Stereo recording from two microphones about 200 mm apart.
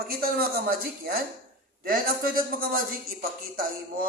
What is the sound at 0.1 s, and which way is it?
A man's voice, 50° right (ahead or behind).